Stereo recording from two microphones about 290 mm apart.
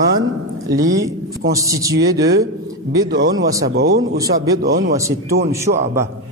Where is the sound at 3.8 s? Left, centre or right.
Right.